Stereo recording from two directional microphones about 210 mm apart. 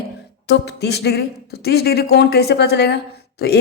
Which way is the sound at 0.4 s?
55° left (ahead or behind).